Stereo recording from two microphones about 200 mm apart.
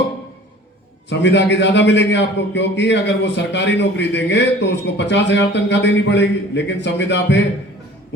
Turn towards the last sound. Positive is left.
turn(degrees=60)  # may be behind; listen again after turning